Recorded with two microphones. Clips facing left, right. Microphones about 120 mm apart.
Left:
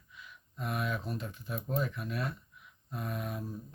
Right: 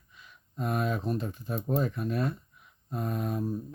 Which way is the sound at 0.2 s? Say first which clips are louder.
Right 6 dB; 40° right (ahead or behind).